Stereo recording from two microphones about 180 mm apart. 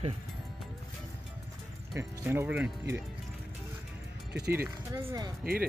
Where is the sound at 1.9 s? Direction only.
15° right (ahead or behind).